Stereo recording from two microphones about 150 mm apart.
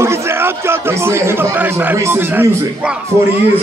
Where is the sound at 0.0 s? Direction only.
15° right (ahead or behind).